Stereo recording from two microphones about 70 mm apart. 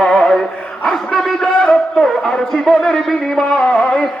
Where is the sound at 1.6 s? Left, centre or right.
Centre.